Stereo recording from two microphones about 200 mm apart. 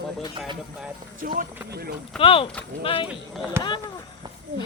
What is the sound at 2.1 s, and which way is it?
Speech, 25° left (ahead or behind).